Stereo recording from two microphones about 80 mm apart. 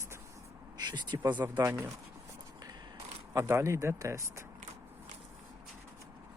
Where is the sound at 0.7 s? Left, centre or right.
Right.